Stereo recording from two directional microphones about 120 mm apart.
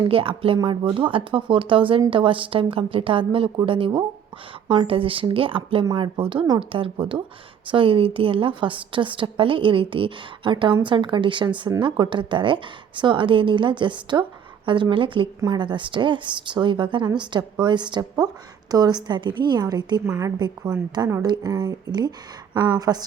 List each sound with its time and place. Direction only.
0.1 s a woman's voice: 50° right (ahead or behind)